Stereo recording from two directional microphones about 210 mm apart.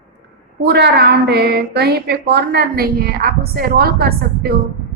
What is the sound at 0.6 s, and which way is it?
A woman's voice, 50° right (ahead or behind).